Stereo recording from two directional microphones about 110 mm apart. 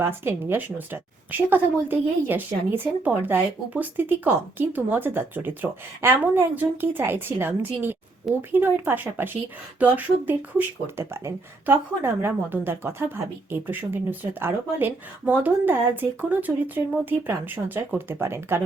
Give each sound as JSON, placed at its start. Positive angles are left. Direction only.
{"t": 0.0, "sound": "a woman's voice", "side_deg": -20}